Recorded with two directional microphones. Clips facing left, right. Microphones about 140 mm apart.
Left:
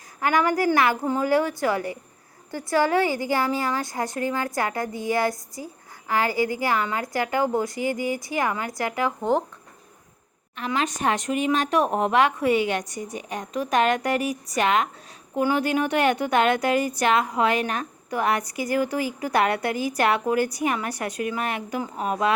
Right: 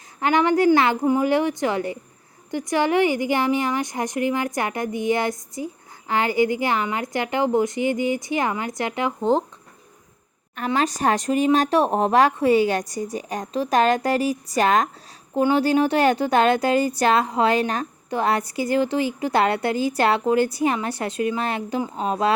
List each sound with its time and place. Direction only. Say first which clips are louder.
0.2 s a woman's voice: right 3 dB; 25° right (ahead or behind)
10.7 s a woman's voice: right 3 dB; 35° right (ahead or behind)